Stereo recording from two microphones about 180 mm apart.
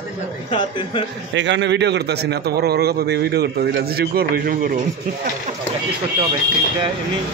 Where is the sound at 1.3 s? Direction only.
80° right; by 4.8 s 50° right (ahead or behind).